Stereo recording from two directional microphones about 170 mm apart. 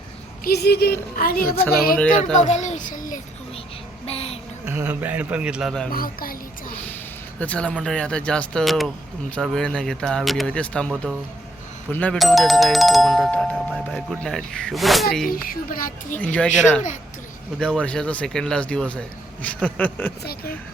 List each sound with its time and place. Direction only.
0.4 s speech: 75° left (ahead or behind)
1.1 s speech: 60° left (ahead or behind)
2.3 s a child's voice: 45° left (ahead or behind)
4.0 s child singing: 35° left (ahead or behind)
4.6 s a man's voice: 10° right (ahead or behind)
5.9 s speech: 60° left (ahead or behind)
7.3 s speech: 10° left (ahead or behind)
15.3 s speech: 55° left (ahead or behind)
16.1 s speech: 10° left (ahead or behind)